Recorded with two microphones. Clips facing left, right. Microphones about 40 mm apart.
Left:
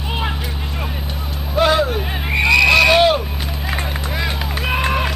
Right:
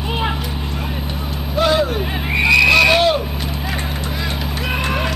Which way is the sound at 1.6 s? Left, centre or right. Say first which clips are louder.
Left 1 dB; centre.